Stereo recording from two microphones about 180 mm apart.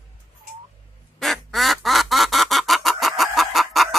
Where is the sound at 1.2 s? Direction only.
Centre (ahead or behind).